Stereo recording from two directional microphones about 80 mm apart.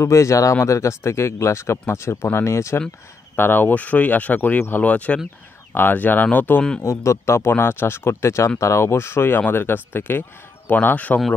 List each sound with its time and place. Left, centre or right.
0.0 s speech: left
6.8 s speech: left